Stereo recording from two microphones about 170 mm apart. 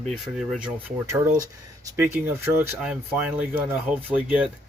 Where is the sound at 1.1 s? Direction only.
15° right (ahead or behind).